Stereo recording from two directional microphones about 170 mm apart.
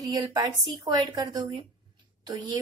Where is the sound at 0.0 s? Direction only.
20° right (ahead or behind).